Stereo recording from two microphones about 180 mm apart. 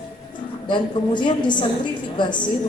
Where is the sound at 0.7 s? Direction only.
25° left (ahead or behind).